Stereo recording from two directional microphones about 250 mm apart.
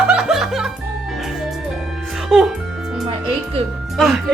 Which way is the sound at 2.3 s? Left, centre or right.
Centre.